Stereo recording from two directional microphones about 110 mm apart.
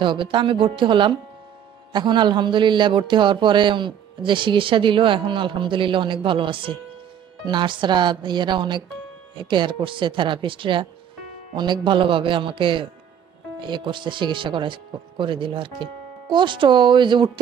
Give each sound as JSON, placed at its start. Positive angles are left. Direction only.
{"t": 0.0, "sound": "a man's voice", "side_deg": -50}